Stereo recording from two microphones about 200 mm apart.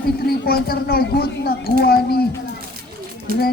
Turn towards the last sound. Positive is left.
turn(degrees=-45)  # may be behind; listen again after turning